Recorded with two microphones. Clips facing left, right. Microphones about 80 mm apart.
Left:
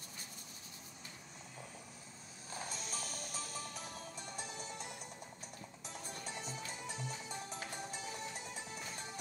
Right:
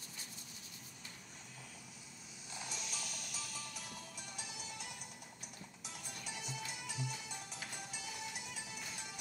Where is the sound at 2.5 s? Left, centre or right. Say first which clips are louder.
Left 3 dB; left.